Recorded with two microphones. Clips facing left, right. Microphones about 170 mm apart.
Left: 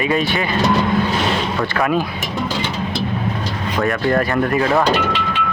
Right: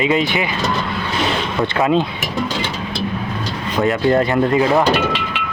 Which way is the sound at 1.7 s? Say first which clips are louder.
Right 3 dB; 20° right (ahead or behind).